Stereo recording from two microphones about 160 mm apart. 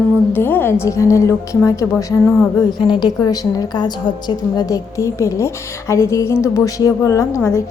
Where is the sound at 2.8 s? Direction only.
30° left (ahead or behind).